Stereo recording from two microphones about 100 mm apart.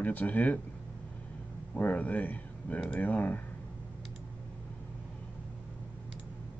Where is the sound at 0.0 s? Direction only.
15° left (ahead or behind).